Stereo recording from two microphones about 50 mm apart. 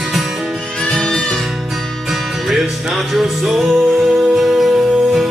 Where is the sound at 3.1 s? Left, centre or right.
Centre.